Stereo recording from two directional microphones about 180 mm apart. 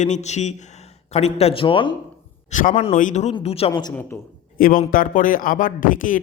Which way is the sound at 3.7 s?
20° left (ahead or behind).